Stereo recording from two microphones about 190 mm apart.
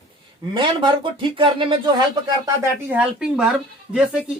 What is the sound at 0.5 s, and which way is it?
Speech, 25° right (ahead or behind).